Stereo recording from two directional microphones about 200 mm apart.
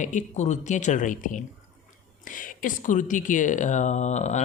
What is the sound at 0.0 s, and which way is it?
Speech, 35° left (ahead or behind).